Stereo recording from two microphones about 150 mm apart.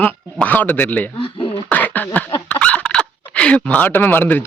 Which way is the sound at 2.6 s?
10° left (ahead or behind).